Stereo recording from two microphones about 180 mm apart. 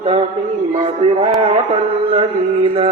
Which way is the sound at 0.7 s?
40° right (ahead or behind).